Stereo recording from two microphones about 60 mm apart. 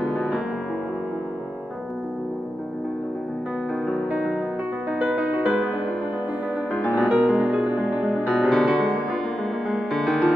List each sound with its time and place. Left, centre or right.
4.1 s music: centre
7.1 s music: centre
8.4 s music: centre